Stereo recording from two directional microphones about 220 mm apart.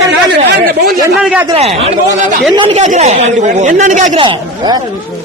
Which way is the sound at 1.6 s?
30° right (ahead or behind).